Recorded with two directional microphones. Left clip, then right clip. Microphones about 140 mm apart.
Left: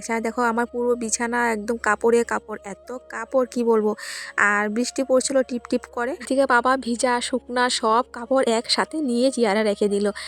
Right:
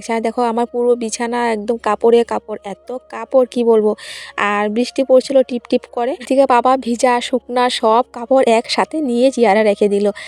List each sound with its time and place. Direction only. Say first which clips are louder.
0.1 s speech: right 6 dB; 15° right (ahead or behind)